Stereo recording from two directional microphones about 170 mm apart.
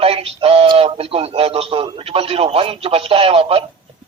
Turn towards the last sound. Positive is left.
turn(degrees=-35)  # may be behind; listen again after turning